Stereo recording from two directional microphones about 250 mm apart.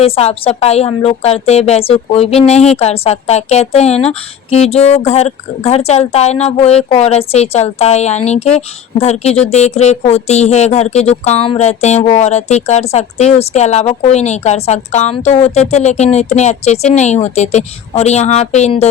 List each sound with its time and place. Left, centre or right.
0.0 s speech: left